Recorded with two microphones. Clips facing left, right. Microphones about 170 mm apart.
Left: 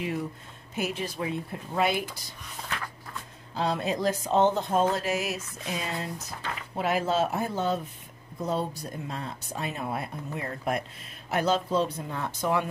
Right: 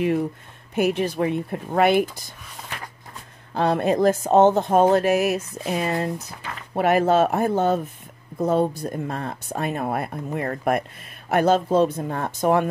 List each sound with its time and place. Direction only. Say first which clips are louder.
0.7 s speech: right 10 dB; 60° right (ahead or behind)
3.5 s speech: right 8 dB; 55° right (ahead or behind)